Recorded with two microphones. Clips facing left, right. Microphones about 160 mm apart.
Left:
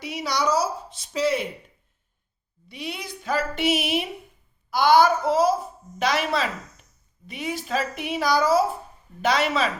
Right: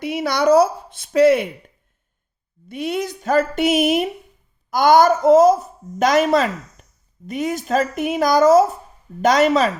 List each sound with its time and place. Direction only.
0.0 s speech: 55° right (ahead or behind)
2.6 s a woman's voice: 50° right (ahead or behind)